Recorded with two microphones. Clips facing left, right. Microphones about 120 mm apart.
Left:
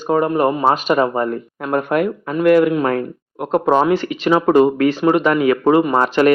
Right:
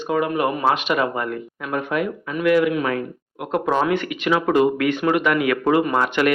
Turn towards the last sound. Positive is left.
turn(degrees=35)  # may be behind; listen again after turning